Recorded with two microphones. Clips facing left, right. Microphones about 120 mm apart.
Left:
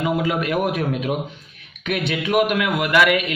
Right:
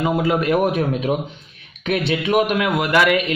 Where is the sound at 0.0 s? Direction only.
35° right (ahead or behind).